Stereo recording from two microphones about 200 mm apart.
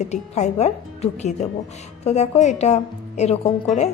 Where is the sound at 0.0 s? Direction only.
35° left (ahead or behind).